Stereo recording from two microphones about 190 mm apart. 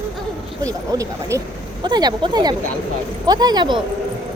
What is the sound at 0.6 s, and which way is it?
A child's voice, 20° right (ahead or behind).